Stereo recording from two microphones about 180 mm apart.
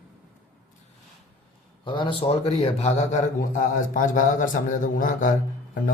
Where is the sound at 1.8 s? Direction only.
25° left (ahead or behind).